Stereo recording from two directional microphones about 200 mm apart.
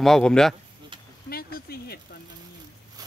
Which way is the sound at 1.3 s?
50° left (ahead or behind).